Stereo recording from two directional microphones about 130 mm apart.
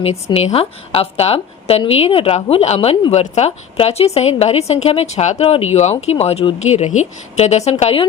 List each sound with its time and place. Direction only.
0.3 s a woman's voice: 50° left (ahead or behind)